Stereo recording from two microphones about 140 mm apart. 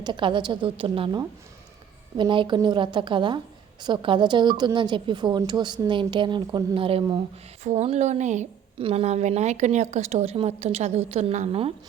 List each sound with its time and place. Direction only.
0.0 s a woman's voice: 35° right (ahead or behind); by 8.4 s 60° right (ahead or behind)
8.8 s a woman's voice: 45° right (ahead or behind)